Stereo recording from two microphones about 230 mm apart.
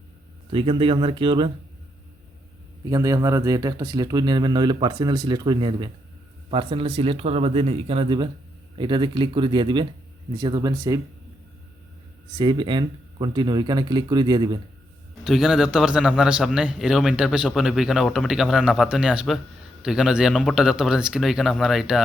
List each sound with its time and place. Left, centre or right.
0.5 s speech: right
2.9 s speech: centre
12.4 s speech: centre
15.2 s a man's voice: centre